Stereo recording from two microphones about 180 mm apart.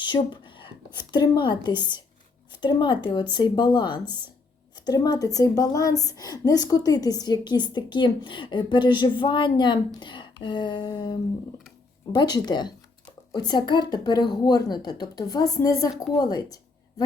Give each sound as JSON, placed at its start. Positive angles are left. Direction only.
{"t": 0.0, "sound": "a woman's voice", "side_deg": 25}